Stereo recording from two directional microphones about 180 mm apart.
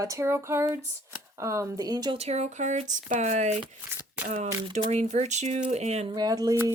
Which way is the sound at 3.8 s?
15° right (ahead or behind).